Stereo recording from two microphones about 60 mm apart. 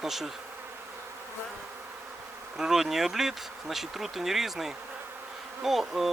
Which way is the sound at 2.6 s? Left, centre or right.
Centre.